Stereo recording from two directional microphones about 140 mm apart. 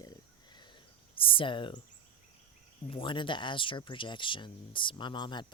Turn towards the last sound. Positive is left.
turn(degrees=35)  # may be behind; listen again after turning